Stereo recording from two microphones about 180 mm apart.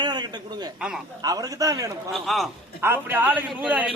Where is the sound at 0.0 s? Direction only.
25° right (ahead or behind).